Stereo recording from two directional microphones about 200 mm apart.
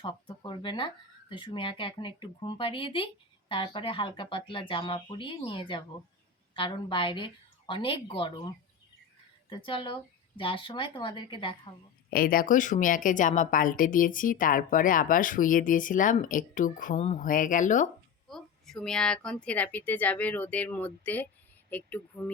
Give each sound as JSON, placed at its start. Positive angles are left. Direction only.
{"t": 0.0, "sound": "speech", "side_deg": 25}
{"t": 9.5, "sound": "speech", "side_deg": 25}
{"t": 12.1, "sound": "speech", "side_deg": 45}
{"t": 18.3, "sound": "speech", "side_deg": 0}